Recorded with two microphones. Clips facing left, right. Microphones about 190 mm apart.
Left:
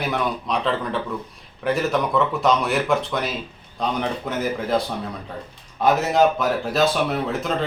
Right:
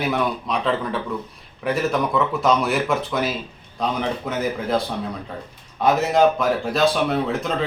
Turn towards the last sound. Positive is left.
turn(degrees=0)  # may be behind; listen again after turning